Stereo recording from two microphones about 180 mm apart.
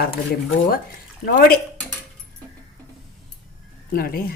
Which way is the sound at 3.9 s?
55° left (ahead or behind).